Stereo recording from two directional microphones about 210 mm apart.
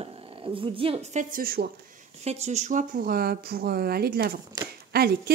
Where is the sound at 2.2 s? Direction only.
30° right (ahead or behind); by 5.2 s 50° right (ahead or behind).